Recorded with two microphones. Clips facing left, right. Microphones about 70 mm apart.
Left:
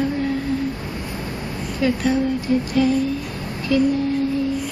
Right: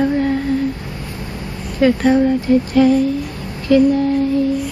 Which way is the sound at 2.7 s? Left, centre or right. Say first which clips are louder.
Right 6 dB; right.